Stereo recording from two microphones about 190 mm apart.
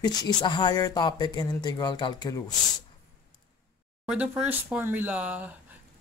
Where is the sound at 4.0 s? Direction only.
5° right (ahead or behind).